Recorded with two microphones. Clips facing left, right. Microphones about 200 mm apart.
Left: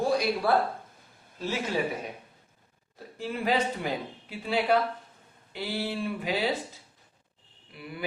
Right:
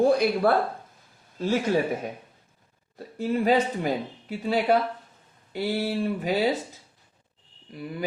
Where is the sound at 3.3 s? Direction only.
40° right (ahead or behind).